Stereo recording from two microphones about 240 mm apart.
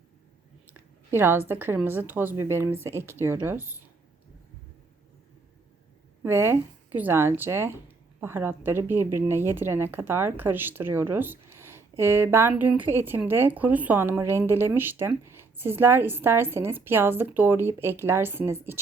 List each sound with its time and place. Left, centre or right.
0.7 s a sound: centre
1.5 s speech: centre
6.2 s speech: centre